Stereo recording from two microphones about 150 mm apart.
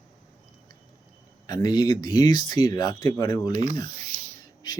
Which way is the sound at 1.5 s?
30° left (ahead or behind).